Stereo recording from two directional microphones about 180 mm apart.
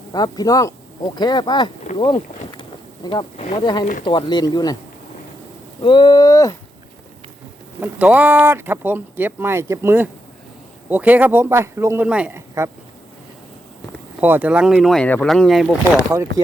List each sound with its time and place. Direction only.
0.1 s speech: 20° left (ahead or behind)
5.8 s speech: 25° left (ahead or behind)
7.8 s speech: 10° right (ahead or behind)
14.2 s speech: 10° right (ahead or behind)